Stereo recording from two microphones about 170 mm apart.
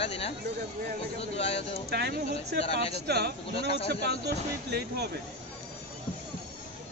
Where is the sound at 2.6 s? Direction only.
35° left (ahead or behind).